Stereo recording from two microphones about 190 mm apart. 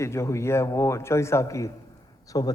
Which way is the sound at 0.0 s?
15° left (ahead or behind).